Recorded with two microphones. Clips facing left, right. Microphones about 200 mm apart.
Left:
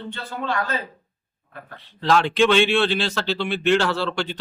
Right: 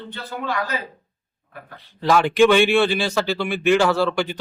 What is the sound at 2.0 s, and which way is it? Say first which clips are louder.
Speech: right 3 dB; 10° right (ahead or behind).